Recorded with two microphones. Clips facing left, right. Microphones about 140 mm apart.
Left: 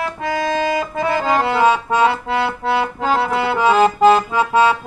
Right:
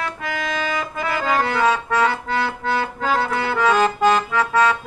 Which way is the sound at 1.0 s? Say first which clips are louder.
Left 3 dB; 25° left (ahead or behind).